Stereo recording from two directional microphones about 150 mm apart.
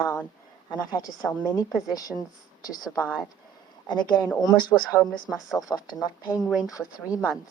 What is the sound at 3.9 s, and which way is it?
Speech, 30° left (ahead or behind).